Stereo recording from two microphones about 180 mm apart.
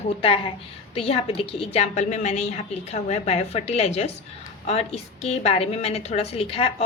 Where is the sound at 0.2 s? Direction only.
30° left (ahead or behind).